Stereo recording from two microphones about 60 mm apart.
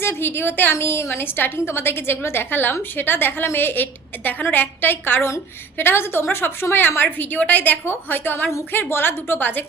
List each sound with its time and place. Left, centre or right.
0.0 s a woman's voice: left